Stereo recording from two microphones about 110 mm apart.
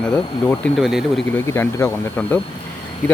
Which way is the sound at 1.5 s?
25° left (ahead or behind).